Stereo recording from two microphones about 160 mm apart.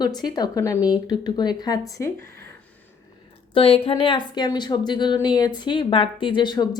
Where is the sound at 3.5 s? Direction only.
35° left (ahead or behind).